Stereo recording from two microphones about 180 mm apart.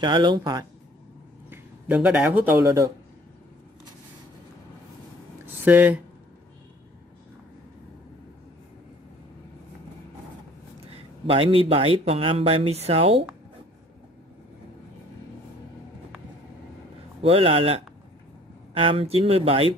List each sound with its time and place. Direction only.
0.0 s speech: 25° right (ahead or behind)
1.5 s speech: 5° right (ahead or behind)
5.6 s speech: 10° right (ahead or behind)
10.9 s speech: 30° right (ahead or behind)
17.2 s speech: 30° right (ahead or behind)